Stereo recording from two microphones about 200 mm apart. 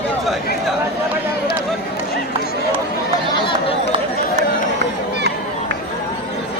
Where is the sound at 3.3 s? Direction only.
25° left (ahead or behind).